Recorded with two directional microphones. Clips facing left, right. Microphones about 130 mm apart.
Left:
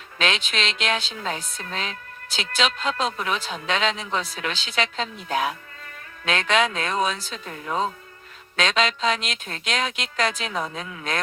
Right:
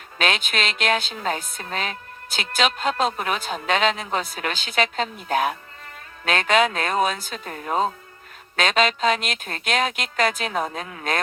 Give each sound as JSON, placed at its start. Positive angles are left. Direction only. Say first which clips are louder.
{"t": 0.2, "sound": "a woman's voice", "louder": "right 1 dB", "side_deg": -50}